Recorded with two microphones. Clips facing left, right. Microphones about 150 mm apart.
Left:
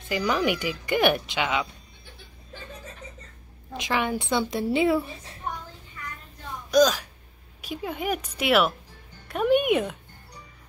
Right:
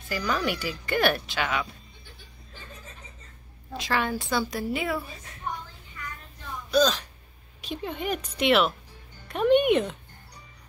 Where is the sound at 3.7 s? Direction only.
20° left (ahead or behind).